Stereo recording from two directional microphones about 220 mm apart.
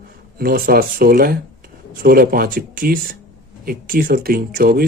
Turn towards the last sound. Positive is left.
turn(degrees=-40)  # may be behind; listen again after turning